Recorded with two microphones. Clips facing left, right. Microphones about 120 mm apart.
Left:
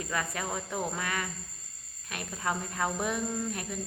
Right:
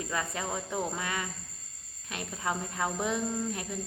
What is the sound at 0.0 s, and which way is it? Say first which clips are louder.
Speech: even; 25° right (ahead or behind).